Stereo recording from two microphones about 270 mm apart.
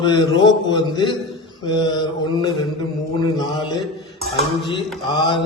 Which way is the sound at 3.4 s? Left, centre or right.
Centre.